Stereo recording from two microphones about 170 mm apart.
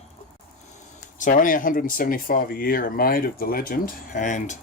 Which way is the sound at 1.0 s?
50° left (ahead or behind).